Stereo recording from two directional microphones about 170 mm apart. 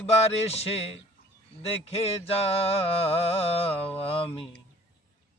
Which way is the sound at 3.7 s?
10° left (ahead or behind).